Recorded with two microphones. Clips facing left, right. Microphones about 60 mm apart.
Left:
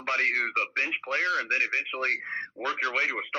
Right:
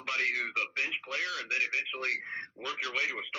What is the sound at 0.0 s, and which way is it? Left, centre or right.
Speech, left.